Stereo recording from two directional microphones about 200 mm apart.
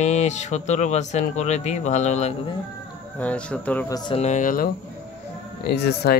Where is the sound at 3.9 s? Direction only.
25° left (ahead or behind).